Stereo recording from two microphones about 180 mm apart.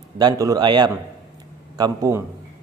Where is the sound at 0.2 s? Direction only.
20° right (ahead or behind).